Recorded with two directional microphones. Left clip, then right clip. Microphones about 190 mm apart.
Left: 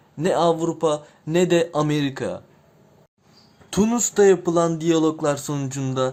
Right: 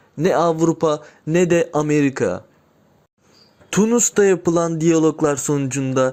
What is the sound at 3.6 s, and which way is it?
Speech, 15° right (ahead or behind).